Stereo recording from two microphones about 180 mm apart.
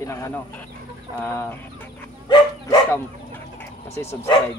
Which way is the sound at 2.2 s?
25° left (ahead or behind).